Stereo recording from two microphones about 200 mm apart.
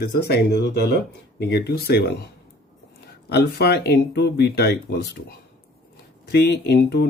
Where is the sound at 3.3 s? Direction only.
55° left (ahead or behind).